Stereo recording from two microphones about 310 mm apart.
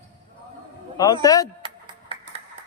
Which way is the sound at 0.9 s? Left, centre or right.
Centre.